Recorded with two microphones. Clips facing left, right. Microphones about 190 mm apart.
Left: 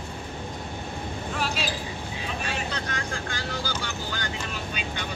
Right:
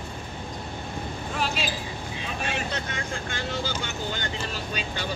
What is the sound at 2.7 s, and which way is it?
Speech, 25° right (ahead or behind).